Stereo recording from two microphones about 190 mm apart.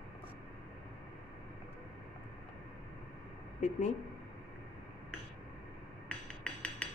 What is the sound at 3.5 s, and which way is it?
Speech, 40° left (ahead or behind).